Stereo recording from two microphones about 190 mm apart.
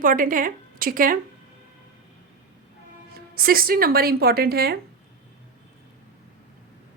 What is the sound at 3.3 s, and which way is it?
A woman's voice, 50° right (ahead or behind).